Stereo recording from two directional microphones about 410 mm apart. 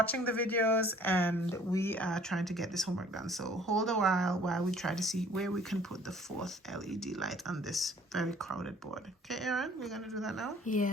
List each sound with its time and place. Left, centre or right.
0.0 s speech: centre
6.9 s speech: centre
10.7 s a woman's voice: centre